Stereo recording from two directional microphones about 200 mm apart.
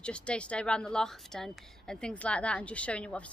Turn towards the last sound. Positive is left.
turn(degrees=5)  # may be behind; listen again after turning